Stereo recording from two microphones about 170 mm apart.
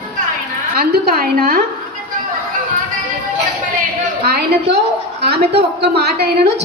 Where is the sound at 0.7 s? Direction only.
65° right (ahead or behind).